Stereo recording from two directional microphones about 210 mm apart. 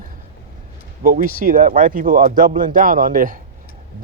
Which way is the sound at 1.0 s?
45° right (ahead or behind).